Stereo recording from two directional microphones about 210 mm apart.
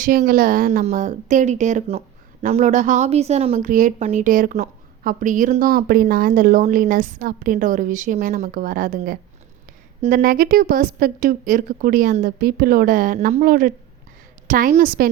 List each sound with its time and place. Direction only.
0.0 s a woman's voice: 40° right (ahead or behind)